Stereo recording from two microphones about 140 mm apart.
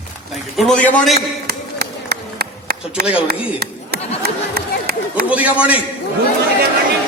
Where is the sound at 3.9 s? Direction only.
90° right.